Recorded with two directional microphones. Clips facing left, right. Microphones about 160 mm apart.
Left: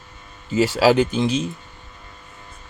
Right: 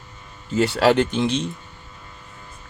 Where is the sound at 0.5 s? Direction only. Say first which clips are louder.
Left 1 dB; centre (ahead or behind).